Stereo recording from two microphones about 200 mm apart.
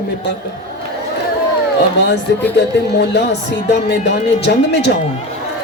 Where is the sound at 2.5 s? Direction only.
55° left (ahead or behind).